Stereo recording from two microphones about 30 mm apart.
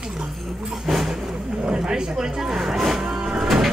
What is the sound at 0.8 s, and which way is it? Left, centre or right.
Speech, centre.